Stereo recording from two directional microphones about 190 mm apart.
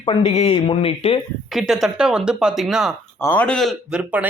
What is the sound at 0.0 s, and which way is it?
A man's voice, 30° left (ahead or behind).